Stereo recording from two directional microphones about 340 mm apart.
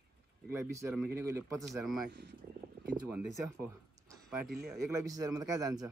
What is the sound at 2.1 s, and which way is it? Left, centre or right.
Speech, right.